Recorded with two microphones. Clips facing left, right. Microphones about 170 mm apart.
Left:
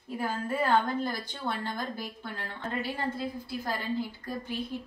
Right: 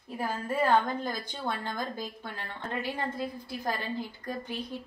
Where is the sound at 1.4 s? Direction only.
10° right (ahead or behind).